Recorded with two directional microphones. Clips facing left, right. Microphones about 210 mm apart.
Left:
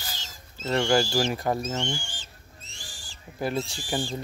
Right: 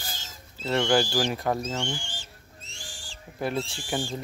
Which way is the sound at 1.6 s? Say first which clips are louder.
Left 1 dB; 10° right (ahead or behind).